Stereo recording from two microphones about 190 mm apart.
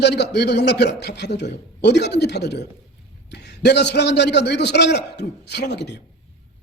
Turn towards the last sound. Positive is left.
turn(degrees=65)  # may be behind; listen again after turning